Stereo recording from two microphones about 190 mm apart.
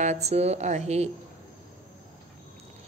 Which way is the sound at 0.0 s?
35° right (ahead or behind).